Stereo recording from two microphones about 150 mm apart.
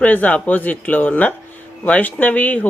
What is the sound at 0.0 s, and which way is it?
Speech, 10° left (ahead or behind).